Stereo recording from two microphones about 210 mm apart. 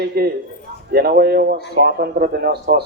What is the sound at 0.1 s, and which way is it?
Speech, 50° right (ahead or behind).